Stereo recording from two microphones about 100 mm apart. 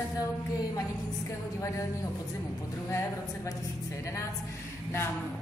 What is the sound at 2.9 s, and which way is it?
Speech, 30° left (ahead or behind).